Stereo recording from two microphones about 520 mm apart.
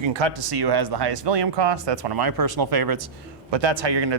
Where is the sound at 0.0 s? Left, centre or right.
Right.